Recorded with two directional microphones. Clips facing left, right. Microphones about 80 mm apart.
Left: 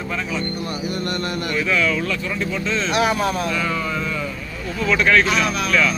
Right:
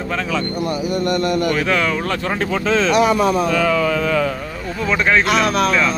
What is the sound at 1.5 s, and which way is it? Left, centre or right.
Speech, right.